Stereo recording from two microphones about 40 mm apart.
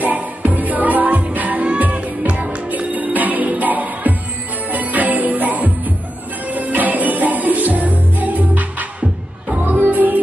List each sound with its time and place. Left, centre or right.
0.0 s music: right
2.7 s music: right